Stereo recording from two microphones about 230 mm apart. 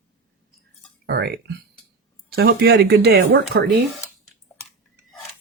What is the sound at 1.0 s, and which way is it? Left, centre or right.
Speech, right.